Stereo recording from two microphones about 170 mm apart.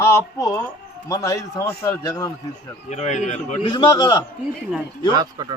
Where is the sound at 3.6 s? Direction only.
30° left (ahead or behind).